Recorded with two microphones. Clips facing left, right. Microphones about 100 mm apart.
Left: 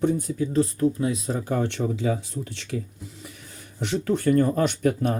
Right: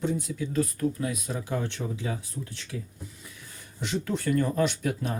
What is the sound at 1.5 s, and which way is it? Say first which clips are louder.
Speech: left 6 dB; 60° left (ahead or behind).